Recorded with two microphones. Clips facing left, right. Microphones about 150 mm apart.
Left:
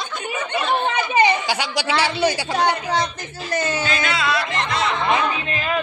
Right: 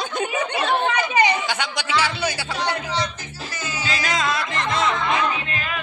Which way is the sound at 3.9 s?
40° right (ahead or behind).